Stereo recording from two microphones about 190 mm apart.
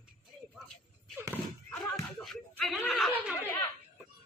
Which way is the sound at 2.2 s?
Centre (ahead or behind).